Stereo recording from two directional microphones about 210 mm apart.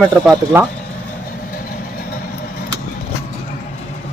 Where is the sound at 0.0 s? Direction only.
5° right (ahead or behind).